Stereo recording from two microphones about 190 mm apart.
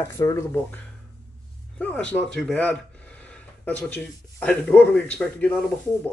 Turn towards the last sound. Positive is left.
turn(degrees=10)  # may be behind; listen again after turning